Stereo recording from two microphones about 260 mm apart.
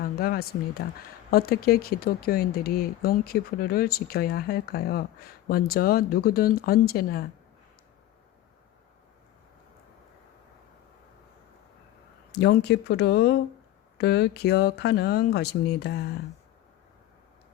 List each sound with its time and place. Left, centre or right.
0.0 s speech: left
12.3 s speech: left